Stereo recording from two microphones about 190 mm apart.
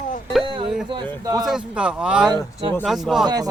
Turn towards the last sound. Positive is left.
turn(degrees=-20)  # may be behind; listen again after turning